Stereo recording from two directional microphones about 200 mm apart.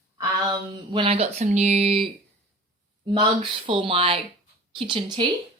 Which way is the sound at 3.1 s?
25° right (ahead or behind).